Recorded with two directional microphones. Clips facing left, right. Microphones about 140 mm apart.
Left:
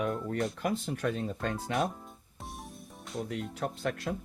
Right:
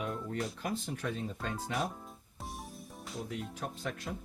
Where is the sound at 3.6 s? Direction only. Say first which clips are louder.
Left 6 dB; 65° left (ahead or behind).